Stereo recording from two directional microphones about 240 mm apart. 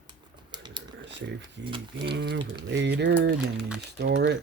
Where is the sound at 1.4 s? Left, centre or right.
Right.